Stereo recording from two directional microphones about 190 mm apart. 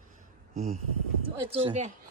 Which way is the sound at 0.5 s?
35° right (ahead or behind).